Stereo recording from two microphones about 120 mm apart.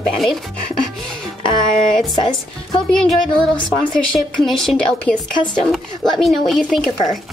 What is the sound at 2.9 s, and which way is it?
Speech, 5° left (ahead or behind).